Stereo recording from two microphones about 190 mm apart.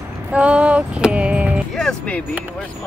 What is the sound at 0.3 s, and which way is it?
Speech, 5° right (ahead or behind).